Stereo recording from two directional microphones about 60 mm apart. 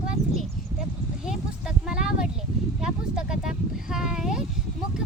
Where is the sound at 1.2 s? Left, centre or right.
Centre.